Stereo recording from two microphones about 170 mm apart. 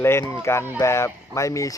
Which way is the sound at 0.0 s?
15° left (ahead or behind).